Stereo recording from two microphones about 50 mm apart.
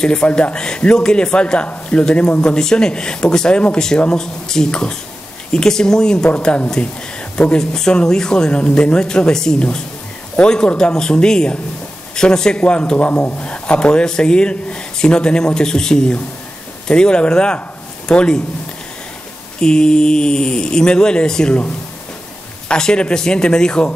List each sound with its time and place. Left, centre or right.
0.0 s speech: centre
6.3 s speech: left
19.6 s speech: centre
22.7 s speech: centre